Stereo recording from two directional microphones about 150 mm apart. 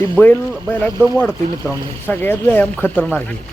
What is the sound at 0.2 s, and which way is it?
Speech, 10° left (ahead or behind).